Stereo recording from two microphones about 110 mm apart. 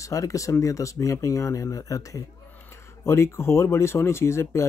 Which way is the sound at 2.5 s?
20° left (ahead or behind).